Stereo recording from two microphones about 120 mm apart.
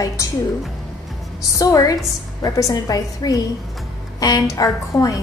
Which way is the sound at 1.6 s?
30° left (ahead or behind).